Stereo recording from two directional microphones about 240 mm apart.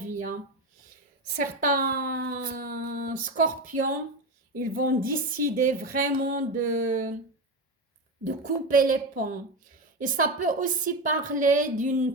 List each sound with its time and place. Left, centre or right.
0.0 s a sound: right
1.4 s speech: right
8.2 s speech: right